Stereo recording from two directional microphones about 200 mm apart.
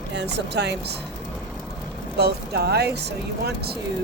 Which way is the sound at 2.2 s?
55° right (ahead or behind).